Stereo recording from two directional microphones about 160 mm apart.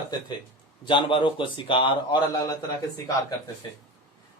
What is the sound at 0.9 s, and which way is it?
A man's voice, 30° left (ahead or behind).